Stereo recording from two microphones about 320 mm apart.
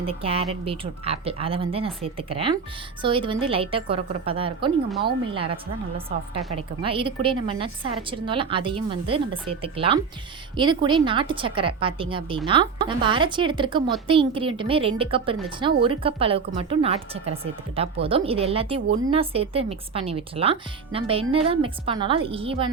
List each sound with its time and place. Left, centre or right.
0.0 s a woman's voice: centre
6.6 s a woman's voice: centre